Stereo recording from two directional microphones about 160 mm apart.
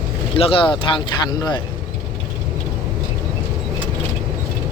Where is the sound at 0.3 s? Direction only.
35° left (ahead or behind).